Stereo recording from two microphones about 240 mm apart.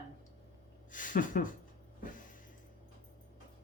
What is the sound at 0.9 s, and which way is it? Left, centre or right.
Speech, left.